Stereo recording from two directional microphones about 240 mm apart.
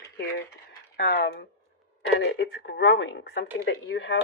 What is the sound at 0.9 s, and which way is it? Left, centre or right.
Speech, left.